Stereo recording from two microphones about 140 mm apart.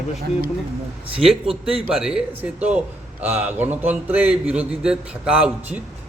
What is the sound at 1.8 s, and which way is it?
A man's voice, 5° right (ahead or behind).